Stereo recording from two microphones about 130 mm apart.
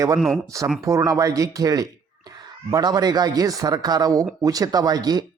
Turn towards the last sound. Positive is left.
turn(degrees=-30)  # may be behind; listen again after turning